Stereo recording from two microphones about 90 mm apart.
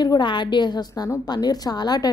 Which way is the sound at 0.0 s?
55° left (ahead or behind).